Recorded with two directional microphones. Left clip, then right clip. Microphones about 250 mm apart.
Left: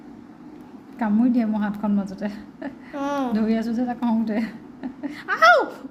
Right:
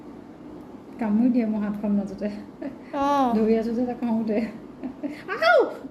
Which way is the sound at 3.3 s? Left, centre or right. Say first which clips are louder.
Right 2 dB; left.